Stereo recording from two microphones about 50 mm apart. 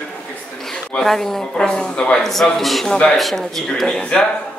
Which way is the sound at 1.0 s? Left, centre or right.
Centre.